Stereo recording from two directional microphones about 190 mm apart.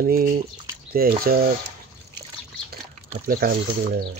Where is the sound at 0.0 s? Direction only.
50° right (ahead or behind).